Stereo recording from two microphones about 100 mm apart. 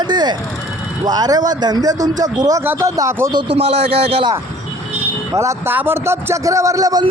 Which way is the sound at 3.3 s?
55° right (ahead or behind).